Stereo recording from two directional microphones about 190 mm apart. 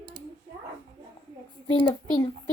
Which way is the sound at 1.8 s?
20° left (ahead or behind).